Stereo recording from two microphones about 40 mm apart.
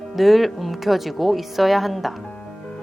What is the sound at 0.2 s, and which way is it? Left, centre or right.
Speech, centre.